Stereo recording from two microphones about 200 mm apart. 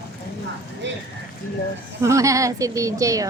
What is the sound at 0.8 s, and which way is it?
Speech, 65° right (ahead or behind).